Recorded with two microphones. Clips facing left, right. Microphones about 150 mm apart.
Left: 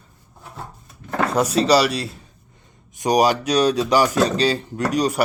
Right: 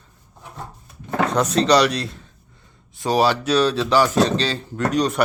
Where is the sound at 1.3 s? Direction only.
10° left (ahead or behind).